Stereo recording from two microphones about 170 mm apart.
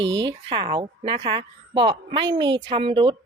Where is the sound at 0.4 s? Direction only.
30° right (ahead or behind).